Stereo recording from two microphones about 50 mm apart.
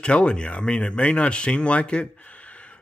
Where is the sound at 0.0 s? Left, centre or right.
Left.